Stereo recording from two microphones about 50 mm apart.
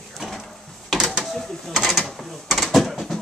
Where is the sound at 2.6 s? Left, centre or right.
Centre.